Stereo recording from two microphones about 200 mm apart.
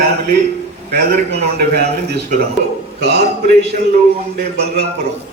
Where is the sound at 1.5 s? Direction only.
55° right (ahead or behind).